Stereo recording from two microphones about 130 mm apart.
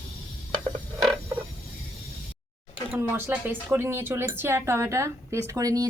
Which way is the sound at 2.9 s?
20° right (ahead or behind).